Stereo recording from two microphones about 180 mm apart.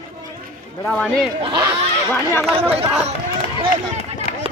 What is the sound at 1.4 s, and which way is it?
Speech, 25° right (ahead or behind).